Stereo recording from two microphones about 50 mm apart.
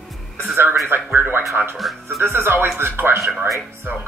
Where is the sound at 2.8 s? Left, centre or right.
Right.